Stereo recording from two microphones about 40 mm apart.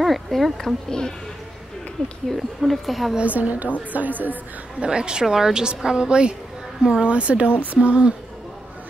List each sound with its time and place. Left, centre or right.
0.0 s speech: centre
0.8 s a woman's voice: centre
2.2 s speech: centre
3.2 s a woman's voice: right
4.8 s a woman's voice: right
7.1 s a woman's voice: right